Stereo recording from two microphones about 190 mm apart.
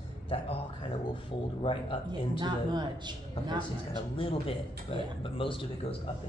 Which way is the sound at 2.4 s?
25° right (ahead or behind).